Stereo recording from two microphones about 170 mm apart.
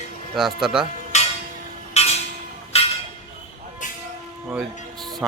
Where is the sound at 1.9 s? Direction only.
40° left (ahead or behind).